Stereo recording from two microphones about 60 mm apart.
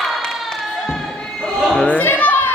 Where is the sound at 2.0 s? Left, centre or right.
Left.